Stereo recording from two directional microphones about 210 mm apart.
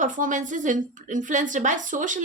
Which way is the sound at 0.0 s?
40° right (ahead or behind).